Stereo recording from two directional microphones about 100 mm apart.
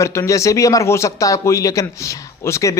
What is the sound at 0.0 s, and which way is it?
A man's voice, 30° left (ahead or behind).